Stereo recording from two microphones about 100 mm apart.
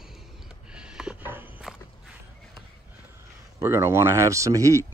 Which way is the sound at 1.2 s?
20° right (ahead or behind).